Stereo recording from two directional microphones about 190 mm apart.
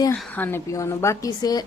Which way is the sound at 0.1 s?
10° left (ahead or behind).